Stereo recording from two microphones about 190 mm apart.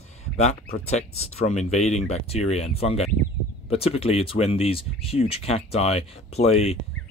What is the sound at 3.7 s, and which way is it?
Speech, 30° left (ahead or behind).